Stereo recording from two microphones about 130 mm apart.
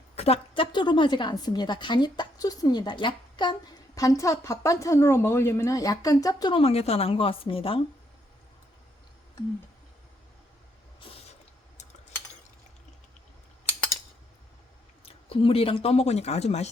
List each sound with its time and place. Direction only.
0.2 s a woman's voice: 45° left (ahead or behind)
3.9 s a woman's voice: 25° left (ahead or behind)
6.5 s a woman's voice: 50° left (ahead or behind)
15.0 s speech: 45° left (ahead or behind)